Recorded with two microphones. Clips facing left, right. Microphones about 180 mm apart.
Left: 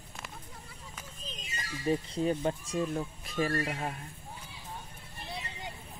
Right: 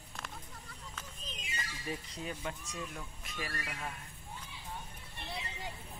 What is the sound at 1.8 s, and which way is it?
Speech, 30° left (ahead or behind).